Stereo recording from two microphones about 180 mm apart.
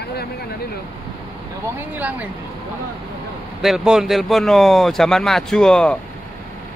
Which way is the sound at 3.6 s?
Centre (ahead or behind).